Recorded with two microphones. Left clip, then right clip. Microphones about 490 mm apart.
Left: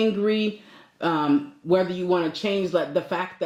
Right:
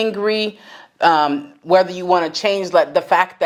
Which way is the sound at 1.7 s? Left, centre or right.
Right.